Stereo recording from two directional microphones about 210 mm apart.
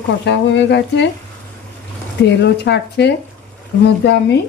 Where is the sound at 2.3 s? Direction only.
55° left (ahead or behind).